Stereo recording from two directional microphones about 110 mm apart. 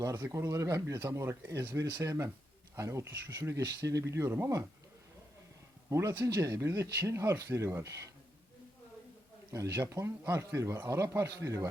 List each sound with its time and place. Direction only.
0.0 s speech: 25° right (ahead or behind)
5.9 s speech: 25° right (ahead or behind)
9.5 s speech: 30° right (ahead or behind)